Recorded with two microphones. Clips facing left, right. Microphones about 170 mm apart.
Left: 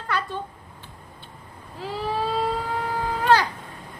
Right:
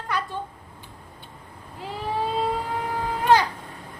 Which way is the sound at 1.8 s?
20° right (ahead or behind).